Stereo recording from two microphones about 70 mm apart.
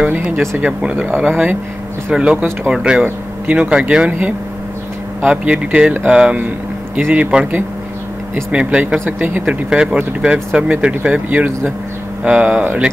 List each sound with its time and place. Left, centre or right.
0.6 s speech: centre
2.1 s speech: centre
3.0 s speech: right
5.2 s speech: centre